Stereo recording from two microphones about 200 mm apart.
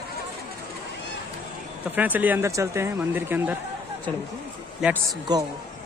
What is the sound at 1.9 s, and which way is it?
Speech, 10° right (ahead or behind).